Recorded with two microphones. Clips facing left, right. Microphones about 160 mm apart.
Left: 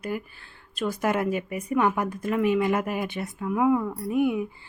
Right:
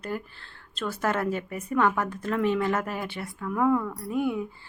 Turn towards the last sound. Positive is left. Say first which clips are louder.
# left 3 dB
turn(degrees=15)  # may be behind; listen again after turning